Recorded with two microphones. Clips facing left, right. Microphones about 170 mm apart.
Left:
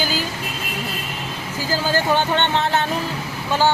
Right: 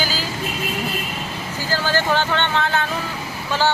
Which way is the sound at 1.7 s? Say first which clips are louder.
Left 1 dB; 15° left (ahead or behind).